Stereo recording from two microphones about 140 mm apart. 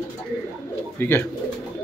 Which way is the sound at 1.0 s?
15° left (ahead or behind).